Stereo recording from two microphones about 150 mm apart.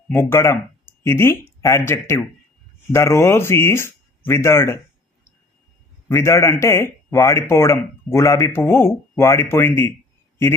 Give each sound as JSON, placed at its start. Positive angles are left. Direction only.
{"t": 0.1, "sound": "a man's voice", "side_deg": 15}
{"t": 6.1, "sound": "a man's voice", "side_deg": 20}